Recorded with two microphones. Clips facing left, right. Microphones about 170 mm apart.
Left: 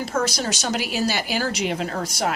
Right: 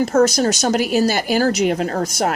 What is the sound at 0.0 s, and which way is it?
Speech, 45° right (ahead or behind).